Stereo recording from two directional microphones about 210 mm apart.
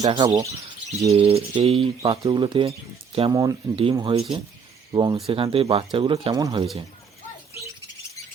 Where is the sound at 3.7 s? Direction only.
25° right (ahead or behind).